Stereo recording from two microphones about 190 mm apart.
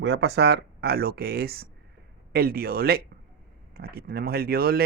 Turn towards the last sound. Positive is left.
turn(degrees=-50)  # may be behind; listen again after turning